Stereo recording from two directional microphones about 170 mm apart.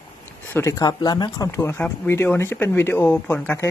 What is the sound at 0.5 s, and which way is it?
A woman's voice, 20° left (ahead or behind).